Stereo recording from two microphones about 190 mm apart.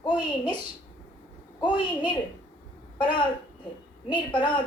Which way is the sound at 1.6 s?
25° left (ahead or behind).